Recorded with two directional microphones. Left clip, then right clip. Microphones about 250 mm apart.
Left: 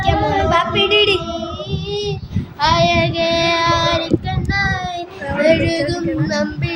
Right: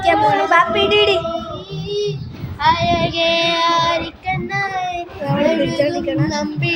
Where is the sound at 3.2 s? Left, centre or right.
Centre.